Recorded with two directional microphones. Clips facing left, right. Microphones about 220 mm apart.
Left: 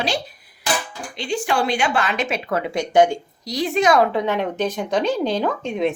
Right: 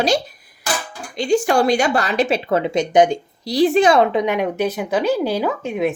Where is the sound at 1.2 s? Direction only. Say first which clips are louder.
Right 6 dB; 45° right (ahead or behind); by 3.5 s 20° right (ahead or behind).